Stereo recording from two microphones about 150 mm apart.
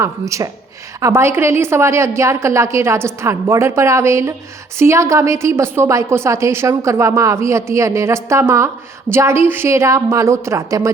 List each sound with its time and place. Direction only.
0.0 s a woman's voice: 20° right (ahead or behind)